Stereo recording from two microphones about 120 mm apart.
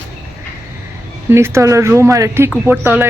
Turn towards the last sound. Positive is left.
turn(degrees=-15)  # may be behind; listen again after turning